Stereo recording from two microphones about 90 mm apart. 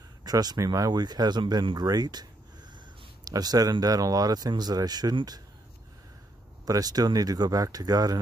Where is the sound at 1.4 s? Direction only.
65° right (ahead or behind).